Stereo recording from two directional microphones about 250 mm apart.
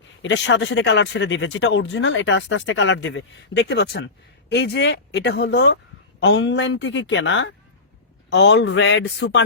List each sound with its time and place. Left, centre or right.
0.2 s speech: left